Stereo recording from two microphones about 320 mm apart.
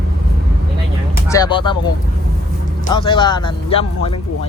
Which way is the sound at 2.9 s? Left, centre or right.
Centre.